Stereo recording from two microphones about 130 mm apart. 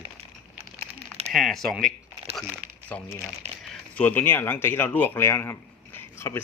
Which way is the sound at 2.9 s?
10° left (ahead or behind).